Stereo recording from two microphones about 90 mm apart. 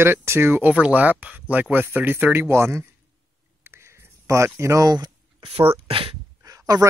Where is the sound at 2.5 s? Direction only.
30° right (ahead or behind).